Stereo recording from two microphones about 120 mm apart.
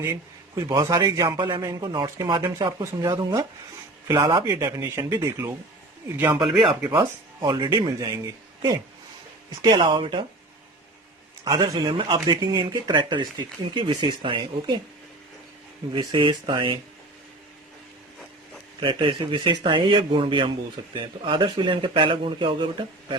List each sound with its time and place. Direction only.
0.1 s speech: 30° right (ahead or behind)
4.4 s speech: 25° right (ahead or behind)
6.9 s speech: 35° right (ahead or behind)
11.4 s speech: 30° right (ahead or behind)
15.9 s speech: 40° right (ahead or behind)
18.8 s a man's voice: 40° right (ahead or behind)